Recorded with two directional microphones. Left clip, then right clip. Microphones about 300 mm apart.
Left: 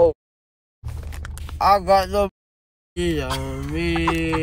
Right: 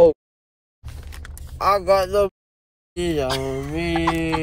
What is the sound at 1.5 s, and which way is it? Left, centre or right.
Speech, centre.